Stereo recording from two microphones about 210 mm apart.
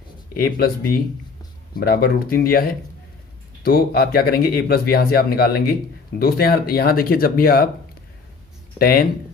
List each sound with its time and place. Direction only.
0.3 s speech: 45° left (ahead or behind)
1.8 s speech: 45° left (ahead or behind)
8.8 s speech: 45° left (ahead or behind)